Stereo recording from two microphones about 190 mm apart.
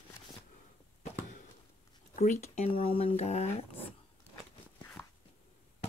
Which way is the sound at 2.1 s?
40° left (ahead or behind).